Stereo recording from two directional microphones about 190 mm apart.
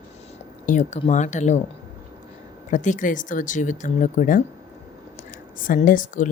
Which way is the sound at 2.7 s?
40° left (ahead or behind).